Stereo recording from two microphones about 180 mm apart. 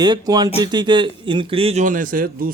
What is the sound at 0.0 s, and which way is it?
Speech, 25° right (ahead or behind).